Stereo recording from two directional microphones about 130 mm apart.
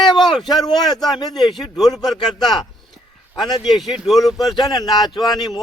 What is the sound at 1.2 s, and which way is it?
Speech, centre (ahead or behind).